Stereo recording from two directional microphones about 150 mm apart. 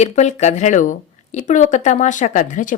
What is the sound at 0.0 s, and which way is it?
A woman's voice, 50° left (ahead or behind).